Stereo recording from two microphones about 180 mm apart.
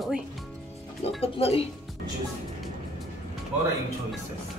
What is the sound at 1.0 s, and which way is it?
Speech, 35° left (ahead or behind).